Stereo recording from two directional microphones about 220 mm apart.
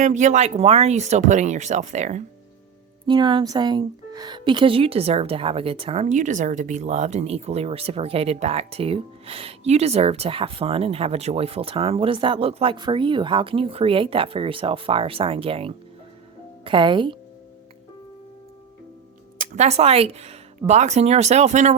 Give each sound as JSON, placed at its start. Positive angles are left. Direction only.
{"t": 0.0, "sound": "speech", "side_deg": -35}
{"t": 3.1, "sound": "speech", "side_deg": -20}
{"t": 19.4, "sound": "speech", "side_deg": -30}